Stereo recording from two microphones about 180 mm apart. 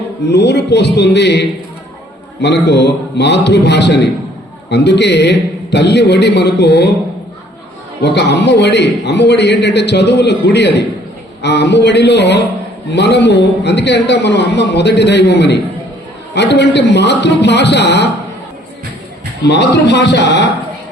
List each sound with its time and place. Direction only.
0.3 s a man's voice: 70° left (ahead or behind)
8.0 s a man's voice: 70° left (ahead or behind)
19.5 s a man's voice: 70° left (ahead or behind)